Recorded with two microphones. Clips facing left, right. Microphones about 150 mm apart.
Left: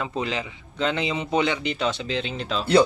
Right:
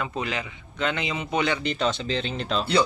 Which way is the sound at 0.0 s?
25° left (ahead or behind).